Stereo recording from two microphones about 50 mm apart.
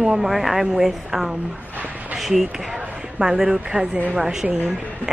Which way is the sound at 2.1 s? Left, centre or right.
Centre.